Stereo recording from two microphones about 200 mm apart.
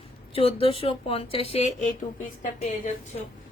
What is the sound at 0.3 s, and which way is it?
A woman's voice, 30° left (ahead or behind).